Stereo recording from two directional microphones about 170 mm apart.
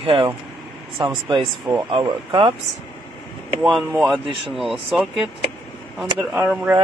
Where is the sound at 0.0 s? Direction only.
30° right (ahead or behind).